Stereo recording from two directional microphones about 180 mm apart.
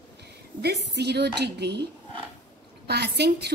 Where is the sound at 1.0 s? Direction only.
70° right (ahead or behind).